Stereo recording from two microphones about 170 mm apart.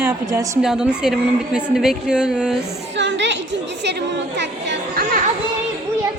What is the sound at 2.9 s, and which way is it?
A woman's voice, 90° right.